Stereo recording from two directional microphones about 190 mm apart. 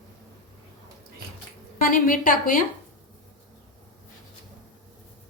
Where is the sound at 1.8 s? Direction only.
50° left (ahead or behind).